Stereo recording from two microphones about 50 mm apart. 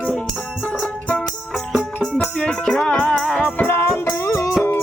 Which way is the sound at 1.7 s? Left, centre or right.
Centre.